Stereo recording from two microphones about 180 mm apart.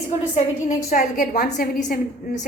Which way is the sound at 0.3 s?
45° left (ahead or behind).